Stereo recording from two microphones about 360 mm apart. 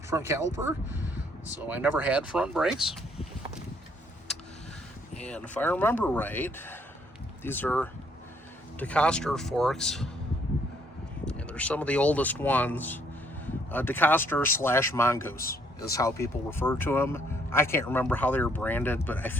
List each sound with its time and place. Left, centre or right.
0.1 s speech: centre
5.2 s speech: centre
11.3 s speech: centre